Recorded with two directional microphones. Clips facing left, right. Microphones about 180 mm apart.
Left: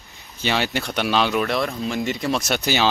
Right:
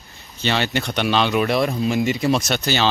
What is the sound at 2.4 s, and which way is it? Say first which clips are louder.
Speech: even; 10° left (ahead or behind).